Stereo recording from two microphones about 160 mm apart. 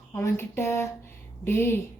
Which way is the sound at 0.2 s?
15° left (ahead or behind).